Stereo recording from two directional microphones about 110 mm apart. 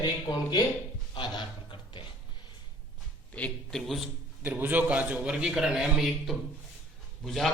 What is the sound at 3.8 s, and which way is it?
Speech, centre (ahead or behind).